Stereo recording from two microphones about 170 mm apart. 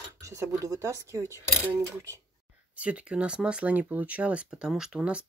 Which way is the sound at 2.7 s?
5° right (ahead or behind).